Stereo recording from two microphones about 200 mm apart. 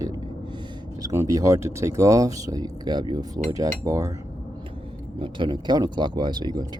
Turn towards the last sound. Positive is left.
turn(degrees=-20)  # may be behind; listen again after turning